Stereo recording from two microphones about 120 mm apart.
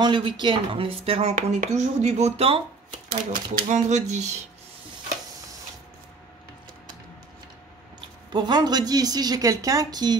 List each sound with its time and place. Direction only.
0.0 s speech: 40° right (ahead or behind)
1.3 s speech: 75° right (ahead or behind); by 3.0 s 50° right (ahead or behind)
3.3 s speech: 85° right
8.3 s a woman's voice: 40° right (ahead or behind)